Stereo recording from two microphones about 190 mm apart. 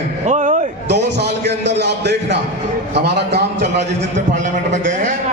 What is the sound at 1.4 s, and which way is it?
Music, 65° right (ahead or behind).